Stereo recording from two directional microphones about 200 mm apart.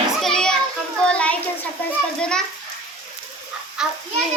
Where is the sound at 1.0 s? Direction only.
5° left (ahead or behind).